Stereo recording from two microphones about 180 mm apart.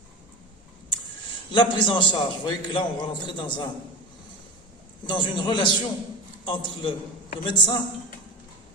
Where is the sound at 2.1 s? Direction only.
25° left (ahead or behind).